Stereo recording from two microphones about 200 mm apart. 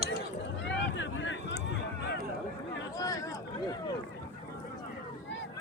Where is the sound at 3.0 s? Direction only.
15° left (ahead or behind).